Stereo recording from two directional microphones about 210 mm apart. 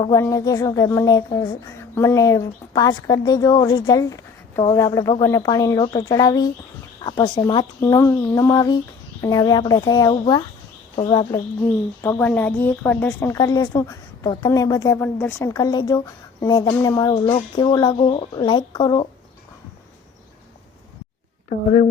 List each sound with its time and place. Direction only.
0.0 s a woman's voice: 15° left (ahead or behind)
12.0 s a woman's voice: 10° left (ahead or behind)